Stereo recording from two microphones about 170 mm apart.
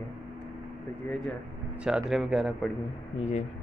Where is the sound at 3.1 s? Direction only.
45° left (ahead or behind).